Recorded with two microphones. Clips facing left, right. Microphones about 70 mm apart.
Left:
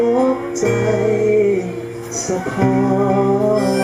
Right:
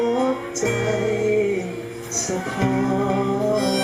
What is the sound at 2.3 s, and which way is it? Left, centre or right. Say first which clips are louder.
Music: left 6 dB; centre.